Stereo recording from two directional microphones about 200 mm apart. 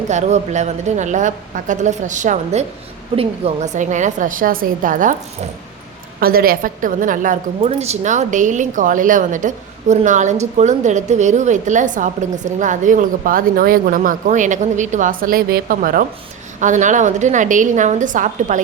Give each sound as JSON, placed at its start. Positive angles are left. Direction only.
{"t": 0.1, "sound": "a woman's voice", "side_deg": -35}
{"t": 6.1, "sound": "a woman's voice", "side_deg": -50}